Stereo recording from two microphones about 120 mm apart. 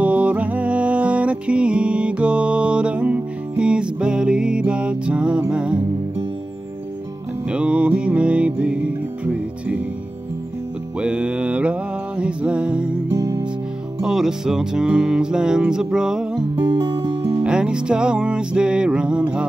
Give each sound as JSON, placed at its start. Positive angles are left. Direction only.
{"t": 0.0, "sound": "music", "side_deg": -10}
{"t": 7.4, "sound": "music", "side_deg": -10}
{"t": 11.0, "sound": "music", "side_deg": -10}
{"t": 14.0, "sound": "music", "side_deg": -5}
{"t": 16.6, "sound": "music", "side_deg": -35}
{"t": 17.4, "sound": "music", "side_deg": -5}